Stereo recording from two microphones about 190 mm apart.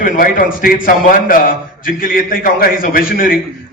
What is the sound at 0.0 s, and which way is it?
A man's voice, 50° left (ahead or behind).